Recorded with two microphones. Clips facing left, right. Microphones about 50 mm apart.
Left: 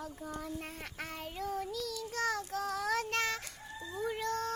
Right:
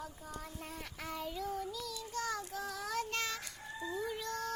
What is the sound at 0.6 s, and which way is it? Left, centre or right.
Child singing, left.